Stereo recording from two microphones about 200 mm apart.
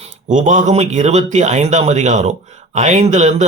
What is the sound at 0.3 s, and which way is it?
Speech, 40° right (ahead or behind).